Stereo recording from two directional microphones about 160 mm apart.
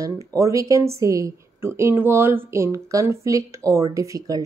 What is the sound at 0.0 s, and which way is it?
Speech, 20° right (ahead or behind).